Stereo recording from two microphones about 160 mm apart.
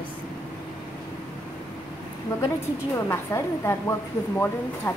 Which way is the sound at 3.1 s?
15° left (ahead or behind).